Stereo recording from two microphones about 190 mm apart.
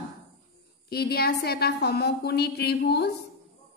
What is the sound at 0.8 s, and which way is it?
A woman's voice, 55° left (ahead or behind).